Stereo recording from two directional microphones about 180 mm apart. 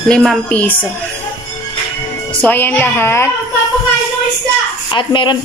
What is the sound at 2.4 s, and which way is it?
Speech, 10° left (ahead or behind).